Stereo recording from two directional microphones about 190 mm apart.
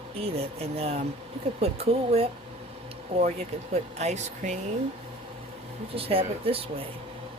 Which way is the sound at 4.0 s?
35° right (ahead or behind).